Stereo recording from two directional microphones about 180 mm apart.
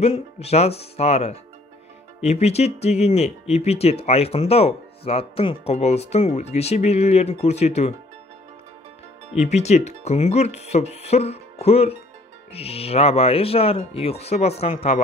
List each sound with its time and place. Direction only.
0.0 s speech: 35° left (ahead or behind)
9.4 s speech: 40° left (ahead or behind)